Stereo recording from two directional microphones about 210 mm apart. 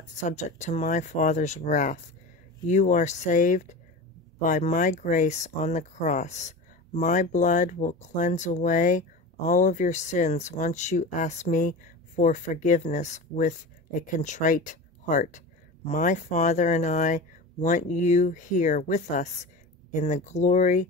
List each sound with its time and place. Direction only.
0.1 s speech: 35° left (ahead or behind)